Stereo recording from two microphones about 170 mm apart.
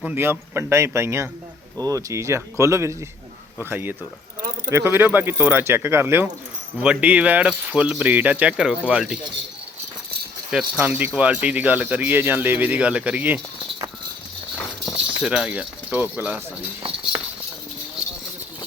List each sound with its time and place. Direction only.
0.0 s speech: 10° right (ahead or behind)
4.4 s a sound: 55° right (ahead or behind)
4.7 s speech: 15° right (ahead or behind)
10.5 s speech: 5° right (ahead or behind)
14.8 s speech: 5° right (ahead or behind)